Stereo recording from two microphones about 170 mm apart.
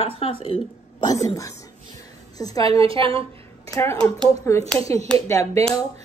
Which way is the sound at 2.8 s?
30° right (ahead or behind).